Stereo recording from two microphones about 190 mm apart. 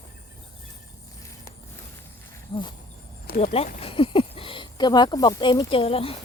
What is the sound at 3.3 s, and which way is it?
Speech, 35° left (ahead or behind).